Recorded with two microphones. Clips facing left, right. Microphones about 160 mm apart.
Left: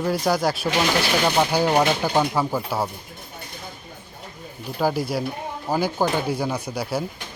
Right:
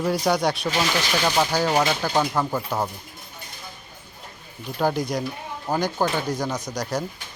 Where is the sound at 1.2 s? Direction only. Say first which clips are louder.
Even; 15° left (ahead or behind).